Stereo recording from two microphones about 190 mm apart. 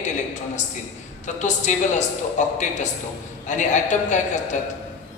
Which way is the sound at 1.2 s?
40° left (ahead or behind).